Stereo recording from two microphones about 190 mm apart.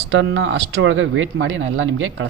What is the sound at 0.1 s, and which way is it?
Speech, 75° right (ahead or behind).